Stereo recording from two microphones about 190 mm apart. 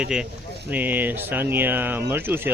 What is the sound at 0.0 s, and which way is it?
Speech, 5° right (ahead or behind).